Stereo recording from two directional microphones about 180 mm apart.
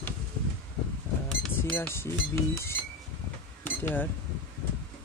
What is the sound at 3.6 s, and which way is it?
Cash register, 10° left (ahead or behind).